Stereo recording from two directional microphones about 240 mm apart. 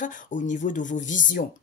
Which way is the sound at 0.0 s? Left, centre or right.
Left.